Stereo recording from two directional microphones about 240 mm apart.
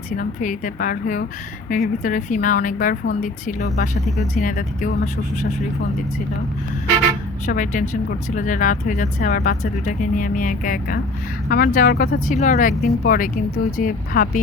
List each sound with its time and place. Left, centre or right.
0.2 s a woman's voice: left
7.4 s a woman's voice: left